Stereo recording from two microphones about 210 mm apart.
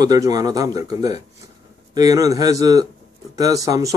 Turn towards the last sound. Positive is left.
turn(degrees=-15)  # may be behind; listen again after turning